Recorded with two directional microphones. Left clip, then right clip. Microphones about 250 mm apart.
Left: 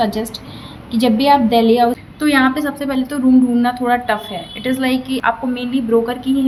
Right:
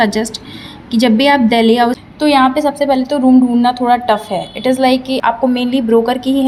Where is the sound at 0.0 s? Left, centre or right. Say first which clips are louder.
Right 4 dB; right.